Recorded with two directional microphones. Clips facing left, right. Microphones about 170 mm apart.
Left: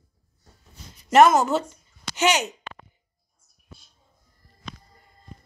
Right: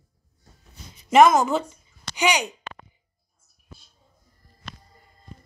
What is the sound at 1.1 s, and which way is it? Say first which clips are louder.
Speech: even; centre (ahead or behind).